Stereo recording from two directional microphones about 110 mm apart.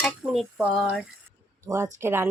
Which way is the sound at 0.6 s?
10° right (ahead or behind).